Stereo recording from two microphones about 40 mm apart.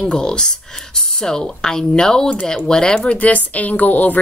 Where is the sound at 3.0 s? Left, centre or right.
Left.